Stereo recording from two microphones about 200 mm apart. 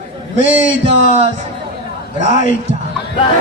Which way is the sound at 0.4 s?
40° left (ahead or behind).